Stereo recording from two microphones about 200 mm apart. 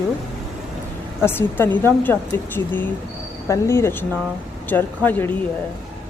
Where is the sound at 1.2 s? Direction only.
10° left (ahead or behind).